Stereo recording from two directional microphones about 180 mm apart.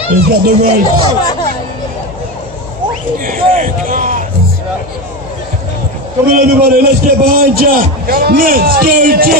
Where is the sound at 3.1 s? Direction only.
50° right (ahead or behind).